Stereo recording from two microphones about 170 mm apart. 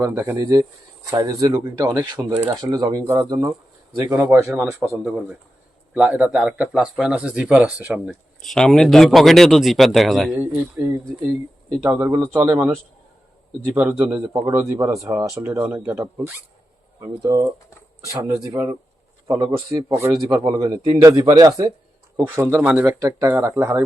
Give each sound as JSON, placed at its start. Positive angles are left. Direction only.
{"t": 0.0, "sound": "speech", "side_deg": -15}
{"t": 14.3, "sound": "speech", "side_deg": -20}
{"t": 22.9, "sound": "speech", "side_deg": -20}